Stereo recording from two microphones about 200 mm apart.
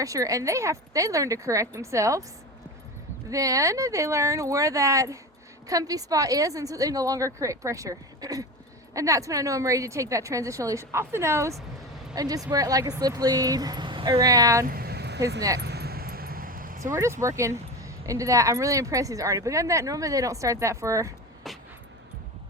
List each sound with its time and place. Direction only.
0.0 s speech: 15° right (ahead or behind)
3.2 s speech: 15° right (ahead or behind)
14.7 s vehicle: 50° right (ahead or behind)
15.4 s speech: 15° right (ahead or behind)
15.6 s a sound: 55° right (ahead or behind)
16.8 s speech: 15° right (ahead or behind)
21.5 s dog: centre (ahead or behind)